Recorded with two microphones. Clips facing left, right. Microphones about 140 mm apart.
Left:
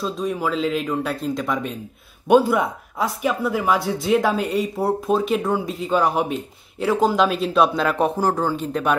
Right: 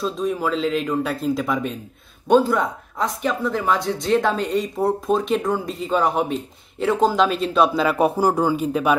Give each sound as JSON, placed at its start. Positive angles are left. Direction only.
{"t": 0.0, "sound": "speech", "side_deg": 0}
{"t": 2.2, "sound": "speech", "side_deg": 10}